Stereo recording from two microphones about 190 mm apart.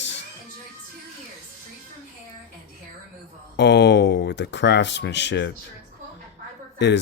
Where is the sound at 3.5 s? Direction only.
65° left (ahead or behind).